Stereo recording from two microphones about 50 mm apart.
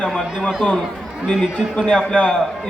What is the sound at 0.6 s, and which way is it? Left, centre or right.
A man's voice, centre.